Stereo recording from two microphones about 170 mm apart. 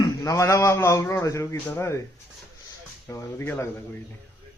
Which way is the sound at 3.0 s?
15° left (ahead or behind).